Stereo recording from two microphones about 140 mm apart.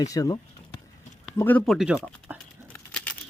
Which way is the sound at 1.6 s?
Centre (ahead or behind).